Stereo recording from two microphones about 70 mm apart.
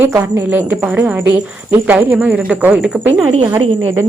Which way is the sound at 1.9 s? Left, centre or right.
Centre.